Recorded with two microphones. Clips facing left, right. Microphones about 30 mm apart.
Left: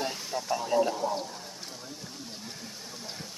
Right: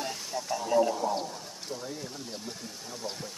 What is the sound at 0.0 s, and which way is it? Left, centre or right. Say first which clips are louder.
Speech: left 2 dB; centre.